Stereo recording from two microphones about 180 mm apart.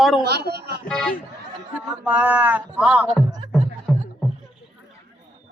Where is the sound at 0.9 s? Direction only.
5° left (ahead or behind).